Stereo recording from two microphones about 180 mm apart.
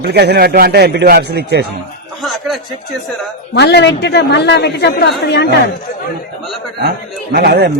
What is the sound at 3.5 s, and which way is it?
A woman's voice, 70° left (ahead or behind).